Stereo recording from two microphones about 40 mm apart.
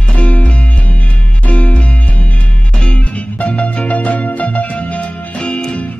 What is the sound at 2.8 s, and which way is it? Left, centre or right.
Music, left.